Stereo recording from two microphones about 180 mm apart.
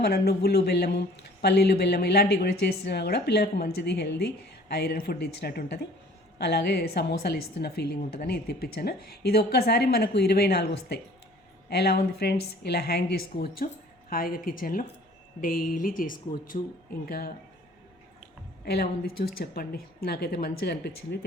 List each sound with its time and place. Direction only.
0.0 s speech: 60° left (ahead or behind)
13.6 s speech: 50° left (ahead or behind)
18.6 s speech: 60° left (ahead or behind)